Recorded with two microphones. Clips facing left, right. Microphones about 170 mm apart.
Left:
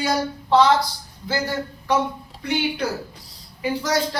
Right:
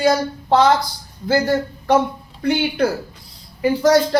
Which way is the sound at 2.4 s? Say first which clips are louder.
Right 6 dB; 55° right (ahead or behind).